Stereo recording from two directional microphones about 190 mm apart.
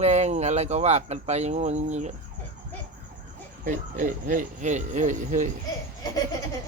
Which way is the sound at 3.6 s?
45° right (ahead or behind).